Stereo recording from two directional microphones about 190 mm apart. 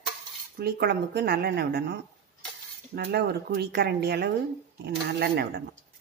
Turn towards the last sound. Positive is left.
turn(degrees=-60)  # may be behind; listen again after turning